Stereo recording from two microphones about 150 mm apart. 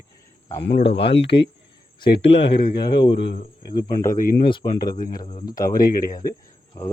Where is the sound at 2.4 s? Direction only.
35° left (ahead or behind).